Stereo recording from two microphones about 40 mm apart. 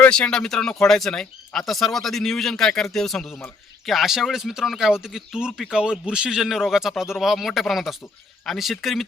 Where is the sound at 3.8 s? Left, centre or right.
Centre.